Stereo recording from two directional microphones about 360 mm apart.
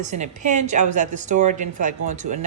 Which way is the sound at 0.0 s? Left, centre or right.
Centre.